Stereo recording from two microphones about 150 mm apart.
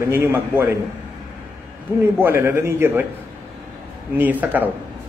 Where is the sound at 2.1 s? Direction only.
15° right (ahead or behind).